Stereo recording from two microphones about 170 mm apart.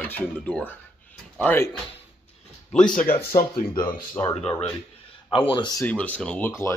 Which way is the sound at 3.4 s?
60° left (ahead or behind).